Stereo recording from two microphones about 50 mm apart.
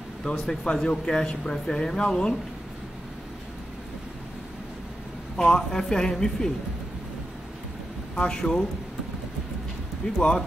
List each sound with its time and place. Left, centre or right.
0.2 s speech: centre
5.5 s speech: centre
8.2 s speech: centre
10.0 s speech: centre